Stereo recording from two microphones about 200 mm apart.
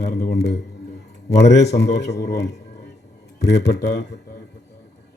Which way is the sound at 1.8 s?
60° left (ahead or behind).